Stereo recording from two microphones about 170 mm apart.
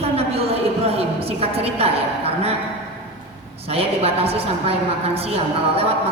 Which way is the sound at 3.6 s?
35° right (ahead or behind).